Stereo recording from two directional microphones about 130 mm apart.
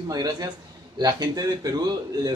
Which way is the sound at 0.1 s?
30° right (ahead or behind).